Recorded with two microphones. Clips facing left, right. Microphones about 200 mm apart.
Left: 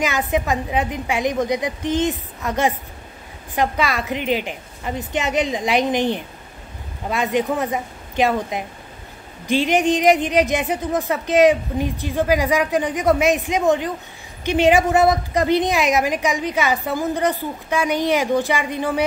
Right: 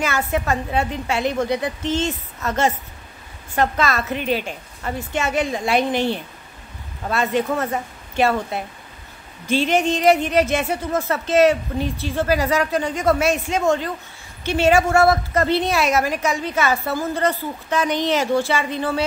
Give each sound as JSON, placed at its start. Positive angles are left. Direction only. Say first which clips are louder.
{"t": 0.0, "sound": "a woman's voice", "louder": "left 1 dB", "side_deg": 15}